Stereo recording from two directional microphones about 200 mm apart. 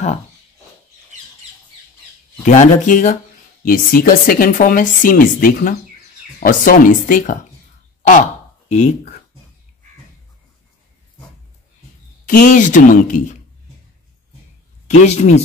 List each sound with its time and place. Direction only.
2.4 s speech: 35° left (ahead or behind)
12.3 s speech: 40° left (ahead or behind)
14.9 s speech: 35° left (ahead or behind)